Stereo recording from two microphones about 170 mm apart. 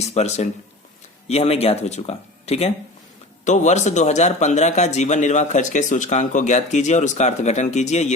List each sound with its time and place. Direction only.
0.0 s a man's voice: 40° left (ahead or behind)